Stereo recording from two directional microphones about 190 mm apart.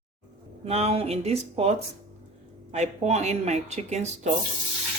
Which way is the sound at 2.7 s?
35° right (ahead or behind).